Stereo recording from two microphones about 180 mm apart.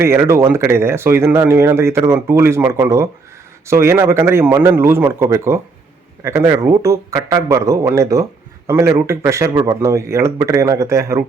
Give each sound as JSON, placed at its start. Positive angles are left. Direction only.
{"t": 0.0, "sound": "speech", "side_deg": -15}